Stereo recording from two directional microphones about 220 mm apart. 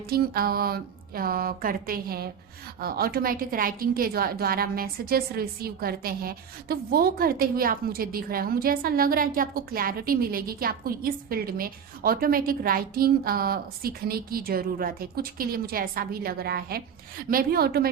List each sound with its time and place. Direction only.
0.1 s a woman's voice: 45° right (ahead or behind)